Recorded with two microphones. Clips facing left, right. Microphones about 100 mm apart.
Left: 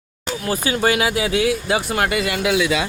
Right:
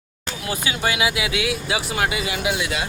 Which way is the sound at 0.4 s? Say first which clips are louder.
Left 5 dB; 40° left (ahead or behind).